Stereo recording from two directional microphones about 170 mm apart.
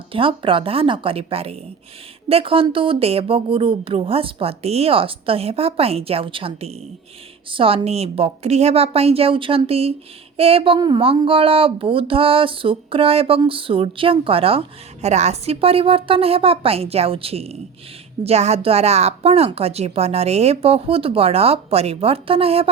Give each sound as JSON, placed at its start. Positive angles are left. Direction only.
{"t": 0.1, "sound": "a woman's voice", "side_deg": -30}